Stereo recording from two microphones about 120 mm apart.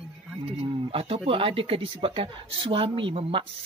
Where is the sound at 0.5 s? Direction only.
55° right (ahead or behind).